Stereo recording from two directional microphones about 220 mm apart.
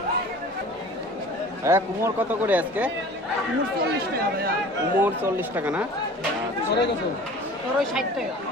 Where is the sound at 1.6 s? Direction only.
10° right (ahead or behind).